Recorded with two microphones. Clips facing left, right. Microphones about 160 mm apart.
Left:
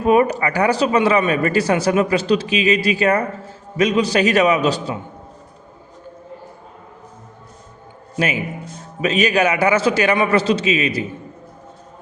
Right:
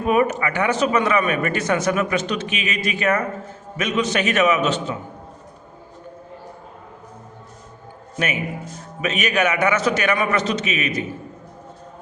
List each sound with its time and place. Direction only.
0.0 s speech: 35° left (ahead or behind)
9.0 s speech: 35° left (ahead or behind)